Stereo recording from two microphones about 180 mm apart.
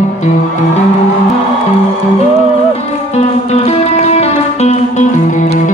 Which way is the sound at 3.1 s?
35° left (ahead or behind).